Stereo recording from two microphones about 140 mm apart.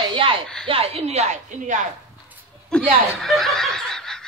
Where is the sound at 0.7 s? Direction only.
45° right (ahead or behind); by 1.9 s 60° right (ahead or behind).